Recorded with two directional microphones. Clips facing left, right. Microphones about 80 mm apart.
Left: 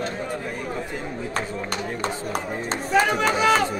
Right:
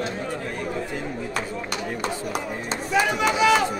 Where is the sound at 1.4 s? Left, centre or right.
Left.